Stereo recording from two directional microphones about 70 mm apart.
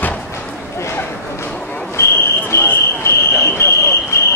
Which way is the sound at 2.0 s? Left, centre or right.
Left.